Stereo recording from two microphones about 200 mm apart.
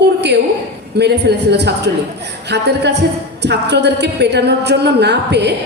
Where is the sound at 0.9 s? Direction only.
55° right (ahead or behind).